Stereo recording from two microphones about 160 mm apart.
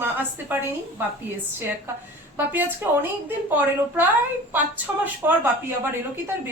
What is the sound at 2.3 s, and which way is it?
A woman's voice, 10° right (ahead or behind).